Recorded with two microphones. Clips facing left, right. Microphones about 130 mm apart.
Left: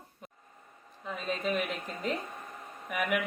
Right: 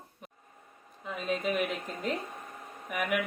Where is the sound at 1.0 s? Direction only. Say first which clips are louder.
Right 2 dB; 5° right (ahead or behind).